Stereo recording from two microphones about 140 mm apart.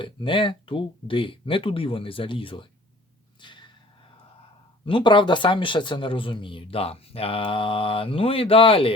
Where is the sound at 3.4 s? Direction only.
35° left (ahead or behind).